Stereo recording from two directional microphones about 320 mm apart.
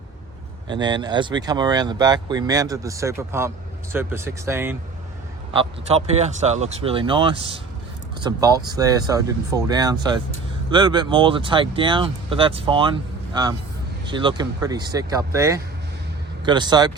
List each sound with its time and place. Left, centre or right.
0.7 s speech: centre
5.5 s speech: centre